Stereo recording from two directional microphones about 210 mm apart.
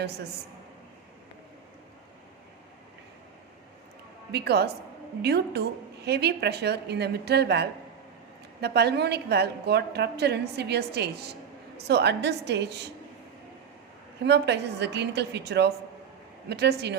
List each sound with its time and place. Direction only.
4.3 s a woman's voice: 50° right (ahead or behind)
14.3 s a woman's voice: 55° right (ahead or behind)